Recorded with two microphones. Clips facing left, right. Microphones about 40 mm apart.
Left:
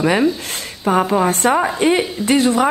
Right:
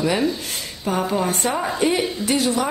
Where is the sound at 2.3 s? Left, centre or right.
Left.